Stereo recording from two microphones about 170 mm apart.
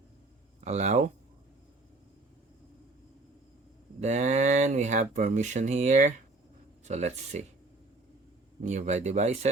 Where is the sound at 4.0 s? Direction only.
45° right (ahead or behind).